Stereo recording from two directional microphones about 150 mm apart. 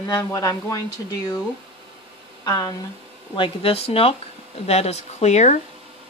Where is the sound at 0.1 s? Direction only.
25° left (ahead or behind).